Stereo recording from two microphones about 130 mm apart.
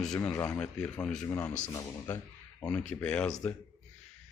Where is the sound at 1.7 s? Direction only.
25° left (ahead or behind).